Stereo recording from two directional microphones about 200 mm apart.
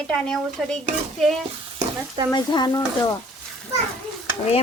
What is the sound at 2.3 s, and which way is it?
Speech, 20° left (ahead or behind).